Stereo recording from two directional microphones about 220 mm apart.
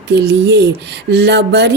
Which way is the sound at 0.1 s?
50° right (ahead or behind).